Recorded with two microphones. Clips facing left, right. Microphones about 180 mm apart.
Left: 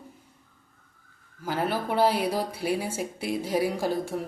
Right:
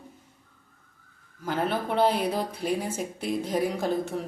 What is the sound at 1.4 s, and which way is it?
Speech, 5° left (ahead or behind).